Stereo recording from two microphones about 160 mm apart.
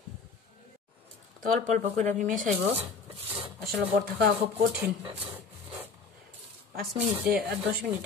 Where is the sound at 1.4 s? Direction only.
55° right (ahead or behind).